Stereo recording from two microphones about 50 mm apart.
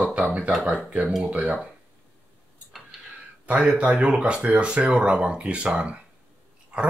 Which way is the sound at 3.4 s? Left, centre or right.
Right.